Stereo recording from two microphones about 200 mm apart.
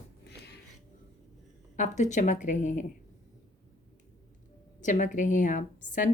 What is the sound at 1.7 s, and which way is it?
A woman's voice, 35° left (ahead or behind).